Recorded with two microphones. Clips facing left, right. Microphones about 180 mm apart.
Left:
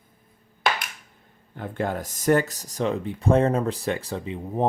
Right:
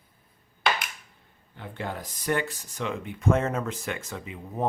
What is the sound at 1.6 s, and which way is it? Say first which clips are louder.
Speech: left 7 dB; 45° left (ahead or behind).